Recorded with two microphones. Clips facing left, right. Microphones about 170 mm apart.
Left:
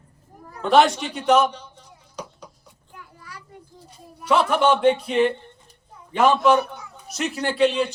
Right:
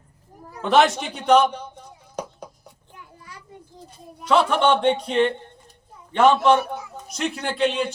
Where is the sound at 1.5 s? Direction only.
55° right (ahead or behind).